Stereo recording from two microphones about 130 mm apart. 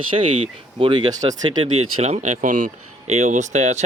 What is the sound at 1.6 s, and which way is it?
Speech, 55° right (ahead or behind).